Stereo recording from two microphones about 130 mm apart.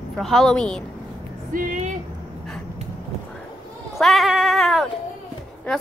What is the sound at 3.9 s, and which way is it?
Speech, centre (ahead or behind).